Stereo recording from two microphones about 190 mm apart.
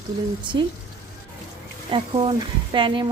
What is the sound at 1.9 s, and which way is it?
Speech, 25° right (ahead or behind).